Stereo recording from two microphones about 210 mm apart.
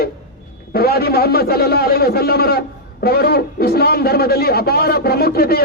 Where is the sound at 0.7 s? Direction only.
45° left (ahead or behind).